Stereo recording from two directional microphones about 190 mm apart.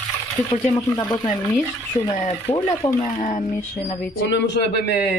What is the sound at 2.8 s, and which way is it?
Speech, 25° left (ahead or behind).